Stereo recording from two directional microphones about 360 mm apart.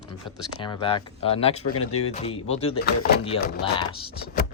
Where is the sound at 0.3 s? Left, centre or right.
Centre.